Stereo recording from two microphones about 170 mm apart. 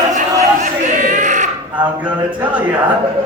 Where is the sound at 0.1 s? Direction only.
45° right (ahead or behind).